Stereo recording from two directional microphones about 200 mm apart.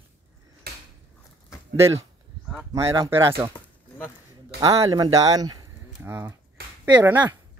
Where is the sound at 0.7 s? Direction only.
50° right (ahead or behind).